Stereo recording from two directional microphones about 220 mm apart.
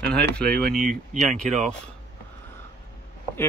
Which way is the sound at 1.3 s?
Centre (ahead or behind).